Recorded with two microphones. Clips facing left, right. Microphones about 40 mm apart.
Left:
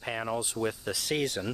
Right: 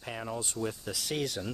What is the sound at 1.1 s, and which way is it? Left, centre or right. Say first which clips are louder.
Speech: left 3 dB; left.